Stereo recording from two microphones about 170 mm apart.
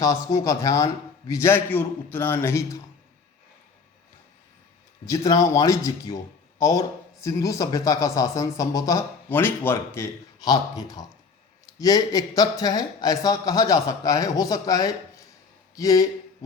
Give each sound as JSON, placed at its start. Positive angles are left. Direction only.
{"t": 0.0, "sound": "a man's voice", "side_deg": 20}
{"t": 5.0, "sound": "speech", "side_deg": 20}